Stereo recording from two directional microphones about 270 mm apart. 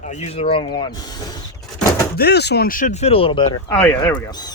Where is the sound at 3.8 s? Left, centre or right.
Centre.